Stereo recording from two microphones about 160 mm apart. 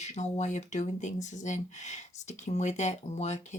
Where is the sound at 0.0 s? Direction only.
45° left (ahead or behind).